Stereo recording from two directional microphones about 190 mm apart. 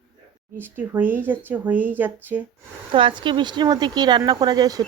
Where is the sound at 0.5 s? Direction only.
10° right (ahead or behind).